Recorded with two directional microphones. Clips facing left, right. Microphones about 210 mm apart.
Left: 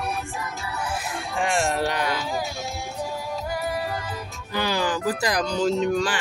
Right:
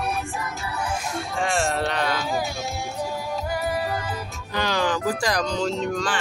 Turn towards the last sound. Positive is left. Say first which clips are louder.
# left 3 dB
turn(degrees=10)  # may be behind; listen again after turning